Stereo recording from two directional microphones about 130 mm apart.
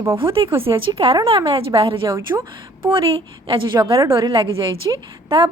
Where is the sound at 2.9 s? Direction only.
45° right (ahead or behind).